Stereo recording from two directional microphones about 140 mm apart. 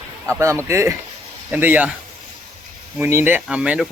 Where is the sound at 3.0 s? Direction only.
15° right (ahead or behind).